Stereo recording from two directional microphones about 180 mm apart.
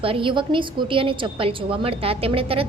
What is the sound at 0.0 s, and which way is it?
A woman's voice, 30° right (ahead or behind).